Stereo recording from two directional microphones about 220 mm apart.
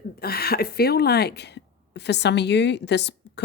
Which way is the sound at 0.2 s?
45° left (ahead or behind).